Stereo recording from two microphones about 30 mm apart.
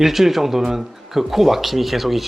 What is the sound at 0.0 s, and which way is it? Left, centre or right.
Speech, centre.